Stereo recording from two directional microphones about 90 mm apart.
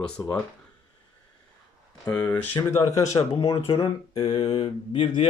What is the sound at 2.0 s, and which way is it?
Speech, 45° left (ahead or behind).